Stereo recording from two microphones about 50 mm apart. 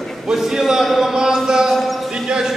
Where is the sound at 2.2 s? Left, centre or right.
Centre.